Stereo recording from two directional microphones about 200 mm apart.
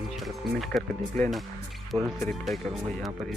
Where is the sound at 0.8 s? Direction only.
Centre (ahead or behind).